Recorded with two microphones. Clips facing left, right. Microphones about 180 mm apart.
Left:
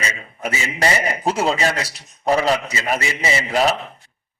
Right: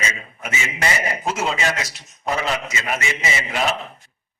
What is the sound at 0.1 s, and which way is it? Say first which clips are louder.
A man's voice: left 4 dB; 35° left (ahead or behind).